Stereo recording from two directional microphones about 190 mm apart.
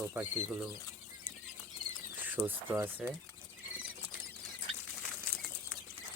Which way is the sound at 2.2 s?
10° right (ahead or behind).